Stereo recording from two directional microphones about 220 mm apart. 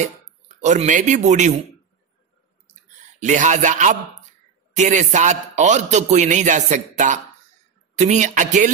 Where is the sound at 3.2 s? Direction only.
35° right (ahead or behind).